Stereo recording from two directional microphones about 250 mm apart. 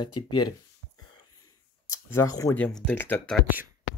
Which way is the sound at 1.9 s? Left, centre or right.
Centre.